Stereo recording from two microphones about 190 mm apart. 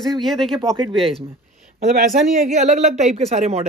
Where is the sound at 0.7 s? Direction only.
25° right (ahead or behind).